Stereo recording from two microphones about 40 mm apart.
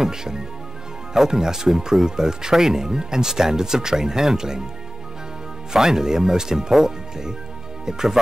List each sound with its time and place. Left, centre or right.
0.0 s speech: centre
5.7 s speech: centre